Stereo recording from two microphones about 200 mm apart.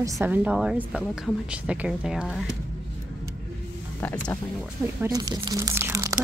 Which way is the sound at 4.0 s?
10° left (ahead or behind).